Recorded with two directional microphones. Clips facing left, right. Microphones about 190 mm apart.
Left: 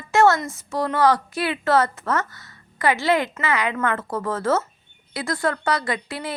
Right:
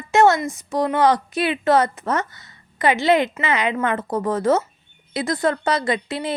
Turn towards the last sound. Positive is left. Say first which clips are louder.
# right 4 dB
turn(degrees=-20)  # may be behind; listen again after turning